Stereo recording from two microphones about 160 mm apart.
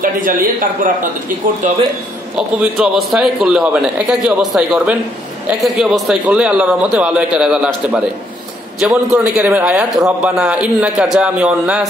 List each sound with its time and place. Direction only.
0.0 s speech: 60° right (ahead or behind)
2.3 s a man's voice: 5° right (ahead or behind)